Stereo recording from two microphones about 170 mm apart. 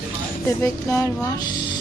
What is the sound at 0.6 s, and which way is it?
Music, 15° left (ahead or behind).